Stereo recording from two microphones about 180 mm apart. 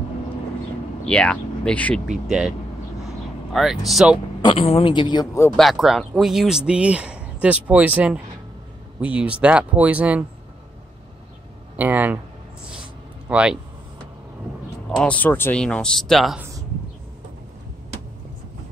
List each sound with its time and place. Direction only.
1.0 s speech: 5° left (ahead or behind)
2.2 s speech: 5° right (ahead or behind)
3.5 s speech: centre (ahead or behind)
4.4 s a woman's voice: 30° left (ahead or behind)
5.6 s speech: centre (ahead or behind)
11.7 s speech: 10° right (ahead or behind)
13.3 s speech: 5° right (ahead or behind)
14.9 s speech: 5° left (ahead or behind)